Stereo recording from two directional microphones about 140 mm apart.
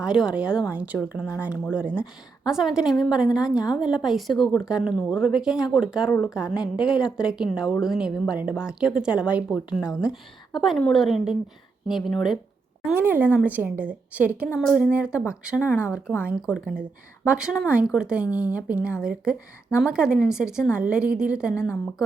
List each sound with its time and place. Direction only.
0.0 s a woman's voice: 5° right (ahead or behind)
12.9 s a woman's voice: 15° right (ahead or behind)
15.6 s speech: 20° left (ahead or behind)
16.1 s a woman's voice: 10° right (ahead or behind)